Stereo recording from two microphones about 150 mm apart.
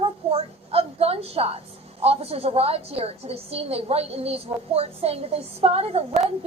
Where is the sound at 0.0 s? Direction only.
40° right (ahead or behind).